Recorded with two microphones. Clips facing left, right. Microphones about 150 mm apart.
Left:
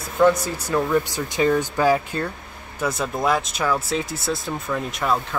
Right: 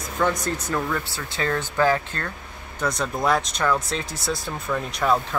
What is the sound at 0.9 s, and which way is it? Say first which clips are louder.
Speech: left 8 dB; 15° left (ahead or behind).